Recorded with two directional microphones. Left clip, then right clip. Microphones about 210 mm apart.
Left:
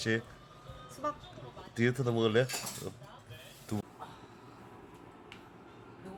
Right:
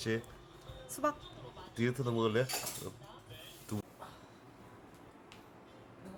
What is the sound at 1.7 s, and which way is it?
Speech, centre (ahead or behind).